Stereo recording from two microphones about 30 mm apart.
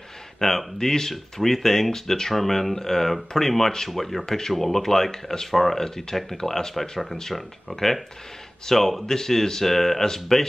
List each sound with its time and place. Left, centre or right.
0.4 s speech: centre
4.3 s speech: centre
5.9 s speech: centre
6.7 s speech: centre
9.0 s speech: left